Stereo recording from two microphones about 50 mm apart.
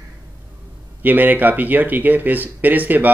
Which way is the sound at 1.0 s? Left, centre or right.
Right.